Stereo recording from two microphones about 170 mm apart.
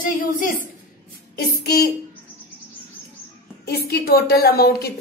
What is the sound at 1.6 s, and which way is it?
Speech, 65° left (ahead or behind).